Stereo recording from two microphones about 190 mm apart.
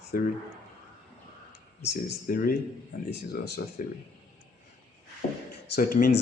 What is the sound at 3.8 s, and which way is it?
Speech, 45° left (ahead or behind).